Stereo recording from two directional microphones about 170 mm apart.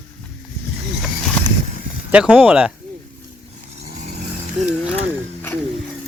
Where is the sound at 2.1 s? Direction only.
10° right (ahead or behind).